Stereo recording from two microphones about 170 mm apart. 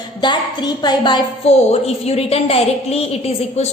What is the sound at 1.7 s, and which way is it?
A woman's voice, 40° left (ahead or behind).